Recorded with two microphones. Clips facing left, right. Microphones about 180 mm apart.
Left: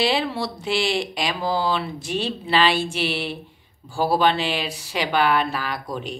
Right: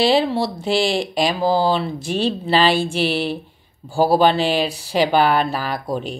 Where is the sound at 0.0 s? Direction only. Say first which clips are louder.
Right 6 dB; 35° right (ahead or behind).